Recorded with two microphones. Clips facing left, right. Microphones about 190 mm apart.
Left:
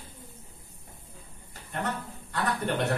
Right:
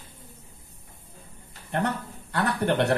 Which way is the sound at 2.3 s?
70° right (ahead or behind).